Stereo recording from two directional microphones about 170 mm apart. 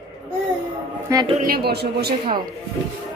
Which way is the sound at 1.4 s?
65° right (ahead or behind).